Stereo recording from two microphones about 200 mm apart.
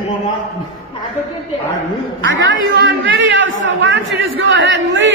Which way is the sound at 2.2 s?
70° right (ahead or behind).